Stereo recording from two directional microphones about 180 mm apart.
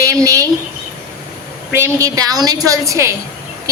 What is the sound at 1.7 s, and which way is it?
A woman's voice, 15° right (ahead or behind).